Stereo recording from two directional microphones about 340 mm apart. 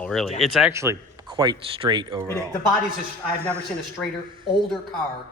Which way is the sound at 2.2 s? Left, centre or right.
Centre.